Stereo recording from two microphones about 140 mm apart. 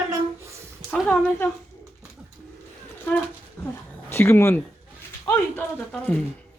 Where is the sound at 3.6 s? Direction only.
20° left (ahead or behind).